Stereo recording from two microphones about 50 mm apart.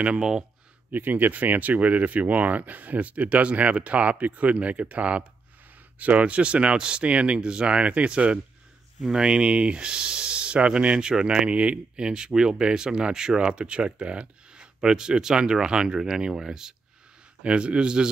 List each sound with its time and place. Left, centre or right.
0.2 s speech: centre
0.9 s speech: right; by 16.7 s centre
17.4 s speech: right